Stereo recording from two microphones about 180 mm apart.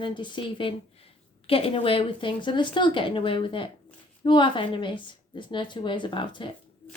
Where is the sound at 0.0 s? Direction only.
25° left (ahead or behind).